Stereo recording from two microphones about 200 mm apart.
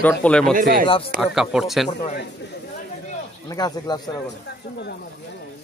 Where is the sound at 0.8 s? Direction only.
25° left (ahead or behind).